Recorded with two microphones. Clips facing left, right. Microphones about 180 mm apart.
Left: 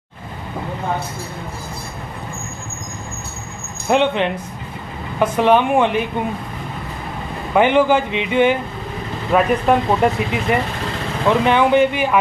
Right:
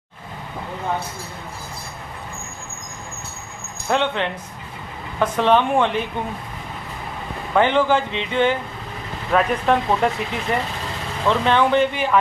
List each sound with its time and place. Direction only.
3.9 s speech: 15° left (ahead or behind)
7.5 s speech: 15° left (ahead or behind)